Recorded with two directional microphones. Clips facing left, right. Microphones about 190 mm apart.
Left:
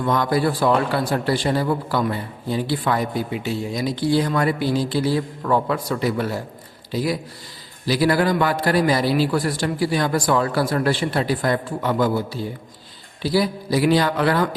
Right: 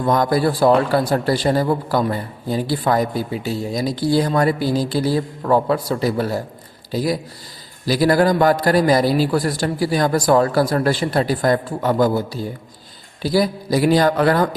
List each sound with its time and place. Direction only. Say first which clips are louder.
0.0 s a man's voice: right 3 dB; 40° right (ahead or behind)